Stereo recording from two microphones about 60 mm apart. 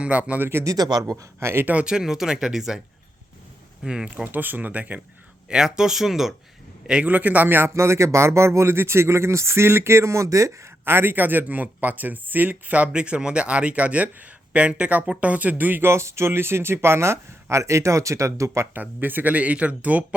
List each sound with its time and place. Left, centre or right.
0.0 s speech: right
0.6 s speech: right
1.4 s speech: right
1.6 s speech: right
1.9 s speech: centre
3.8 s speech: centre
5.5 s a man's voice: centre
7.1 s speech: right
7.7 s speech: right
10.8 s speech: right
15.9 s speech: right
18.7 s speech: right